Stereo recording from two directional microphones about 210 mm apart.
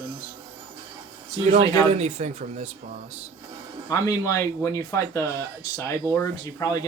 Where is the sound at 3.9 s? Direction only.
15° left (ahead or behind).